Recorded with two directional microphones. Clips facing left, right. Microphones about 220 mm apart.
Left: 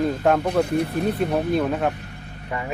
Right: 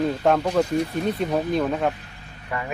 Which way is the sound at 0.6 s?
60° left (ahead or behind).